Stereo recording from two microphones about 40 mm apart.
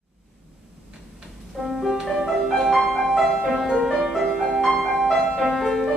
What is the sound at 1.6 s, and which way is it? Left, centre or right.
Music, centre.